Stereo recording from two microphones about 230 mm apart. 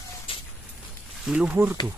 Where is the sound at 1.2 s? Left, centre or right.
Centre.